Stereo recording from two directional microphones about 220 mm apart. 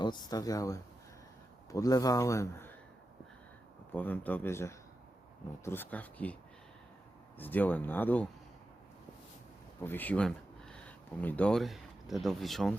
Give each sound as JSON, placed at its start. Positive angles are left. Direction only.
{"t": 0.0, "sound": "speech", "side_deg": 20}
{"t": 3.9, "sound": "speech", "side_deg": 10}
{"t": 7.3, "sound": "speech", "side_deg": 10}
{"t": 9.8, "sound": "speech", "side_deg": 10}